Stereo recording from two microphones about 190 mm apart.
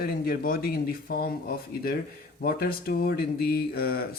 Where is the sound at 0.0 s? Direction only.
55° left (ahead or behind).